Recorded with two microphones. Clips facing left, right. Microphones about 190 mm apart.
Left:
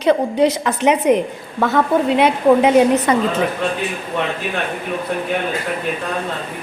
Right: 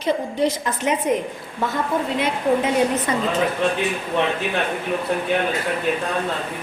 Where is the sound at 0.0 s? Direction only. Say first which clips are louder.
Left 6 dB; 70° left (ahead or behind).